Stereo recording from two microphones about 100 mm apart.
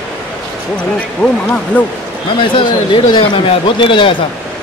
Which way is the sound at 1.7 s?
15° left (ahead or behind).